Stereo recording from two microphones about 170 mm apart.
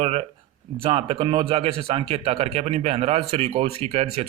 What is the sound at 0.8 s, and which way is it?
A man's voice, 35° right (ahead or behind).